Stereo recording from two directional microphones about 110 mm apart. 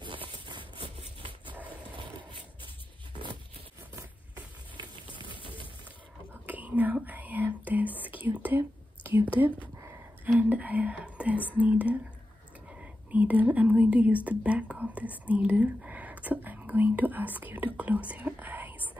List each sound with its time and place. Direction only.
0.0 s a sound: 50° right (ahead or behind)
0.9 s dog: 50° right (ahead or behind)
5.3 s pigeon: 50° left (ahead or behind)
6.4 s whispering: 15° right (ahead or behind)
10.2 s speech: 15° right (ahead or behind)
11.1 s whispering: 10° right (ahead or behind)
11.6 s speech: 15° right (ahead or behind)